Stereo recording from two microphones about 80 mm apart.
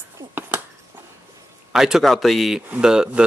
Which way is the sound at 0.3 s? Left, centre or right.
Right.